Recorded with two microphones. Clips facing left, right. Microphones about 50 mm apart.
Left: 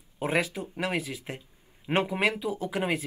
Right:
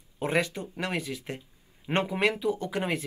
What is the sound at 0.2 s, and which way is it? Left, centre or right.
Speech, centre.